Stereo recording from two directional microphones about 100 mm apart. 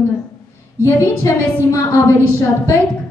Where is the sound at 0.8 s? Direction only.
30° left (ahead or behind).